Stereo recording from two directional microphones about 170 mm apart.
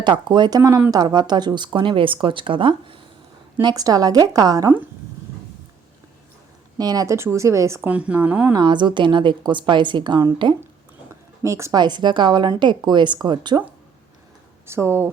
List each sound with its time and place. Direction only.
0.0 s speech: 25° right (ahead or behind)
6.7 s speech: 20° right (ahead or behind)
8.5 s speech: 25° right (ahead or behind)
14.7 s speech: 15° right (ahead or behind)